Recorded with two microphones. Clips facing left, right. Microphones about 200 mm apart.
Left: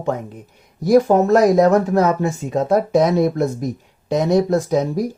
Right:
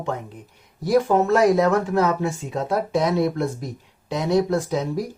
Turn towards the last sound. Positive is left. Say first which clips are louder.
# left 5 dB
turn(degrees=40)  # may be behind; listen again after turning